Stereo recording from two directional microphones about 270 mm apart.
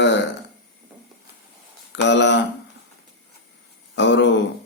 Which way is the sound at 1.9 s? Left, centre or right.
Left.